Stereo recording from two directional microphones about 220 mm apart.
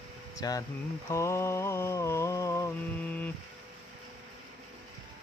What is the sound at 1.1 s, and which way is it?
Mantra, 15° left (ahead or behind).